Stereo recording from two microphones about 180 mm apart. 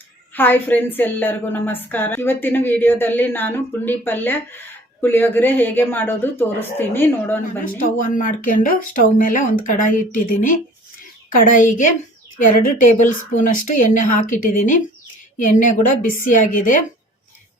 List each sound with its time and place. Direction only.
0.3 s a woman's voice: 10° left (ahead or behind)
7.6 s a woman's voice: 50° left (ahead or behind)